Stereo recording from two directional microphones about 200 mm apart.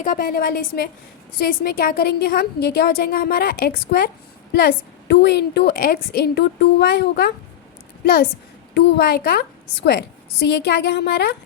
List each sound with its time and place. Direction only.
0.0 s a woman's voice: 45° left (ahead or behind)
8.7 s a woman's voice: 60° left (ahead or behind)